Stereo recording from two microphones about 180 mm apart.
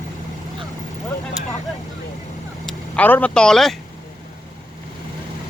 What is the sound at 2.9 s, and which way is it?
Speech, 10° left (ahead or behind).